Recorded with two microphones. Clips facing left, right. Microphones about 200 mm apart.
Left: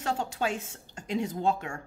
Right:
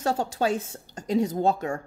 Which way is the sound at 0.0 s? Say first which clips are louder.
Right 5 dB; 40° right (ahead or behind).